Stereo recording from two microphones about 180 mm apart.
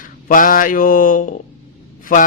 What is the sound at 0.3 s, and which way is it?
A man's voice, 50° left (ahead or behind).